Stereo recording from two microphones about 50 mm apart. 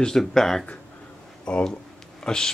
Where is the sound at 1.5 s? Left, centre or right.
Centre.